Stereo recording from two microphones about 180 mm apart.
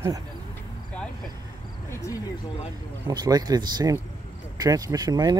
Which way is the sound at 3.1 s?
20° right (ahead or behind).